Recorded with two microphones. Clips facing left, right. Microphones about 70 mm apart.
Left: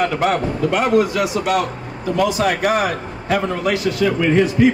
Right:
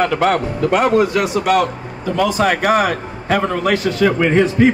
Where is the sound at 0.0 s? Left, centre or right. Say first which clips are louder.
Right 2 dB; right.